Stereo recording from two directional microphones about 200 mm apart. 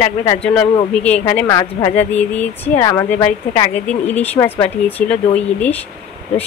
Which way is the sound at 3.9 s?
10° left (ahead or behind).